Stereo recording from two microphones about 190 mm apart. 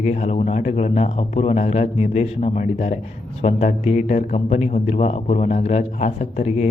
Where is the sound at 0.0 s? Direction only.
35° left (ahead or behind).